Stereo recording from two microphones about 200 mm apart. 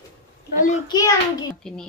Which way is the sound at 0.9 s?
20° left (ahead or behind).